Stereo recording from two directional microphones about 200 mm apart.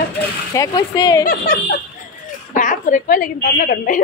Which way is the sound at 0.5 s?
20° left (ahead or behind).